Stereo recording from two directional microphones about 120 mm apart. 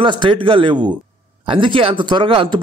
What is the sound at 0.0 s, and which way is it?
A man's voice, 45° right (ahead or behind).